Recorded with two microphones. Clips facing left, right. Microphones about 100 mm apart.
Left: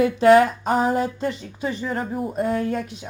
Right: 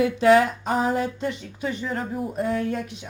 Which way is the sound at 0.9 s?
35° left (ahead or behind).